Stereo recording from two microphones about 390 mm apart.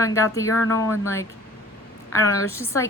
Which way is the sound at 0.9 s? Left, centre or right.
Centre.